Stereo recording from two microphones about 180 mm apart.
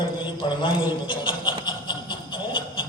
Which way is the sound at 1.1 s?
30° left (ahead or behind).